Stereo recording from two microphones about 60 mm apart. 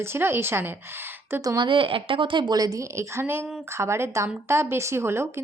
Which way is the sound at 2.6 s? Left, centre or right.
Right.